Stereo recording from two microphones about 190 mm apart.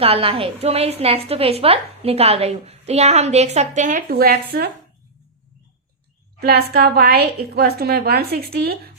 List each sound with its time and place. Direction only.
0.0 s a woman's voice: 30° right (ahead or behind); by 4.7 s 55° right (ahead or behind)
6.4 s a woman's voice: 55° right (ahead or behind)